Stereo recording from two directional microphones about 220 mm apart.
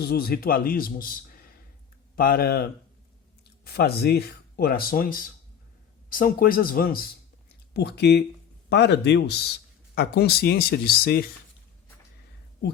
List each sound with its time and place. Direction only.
0.0 s a man's voice: 45° left (ahead or behind)